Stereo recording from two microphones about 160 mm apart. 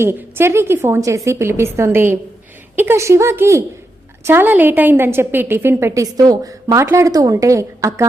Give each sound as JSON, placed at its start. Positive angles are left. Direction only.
{"t": 0.0, "sound": "a woman's voice", "side_deg": -15}